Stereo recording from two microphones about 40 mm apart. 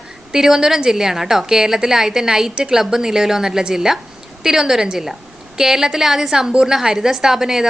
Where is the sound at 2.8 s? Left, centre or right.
Centre.